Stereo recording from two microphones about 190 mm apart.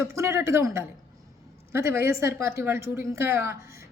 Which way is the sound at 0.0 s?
15° right (ahead or behind).